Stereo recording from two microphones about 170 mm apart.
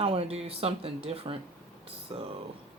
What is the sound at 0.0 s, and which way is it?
Speech, 35° right (ahead or behind).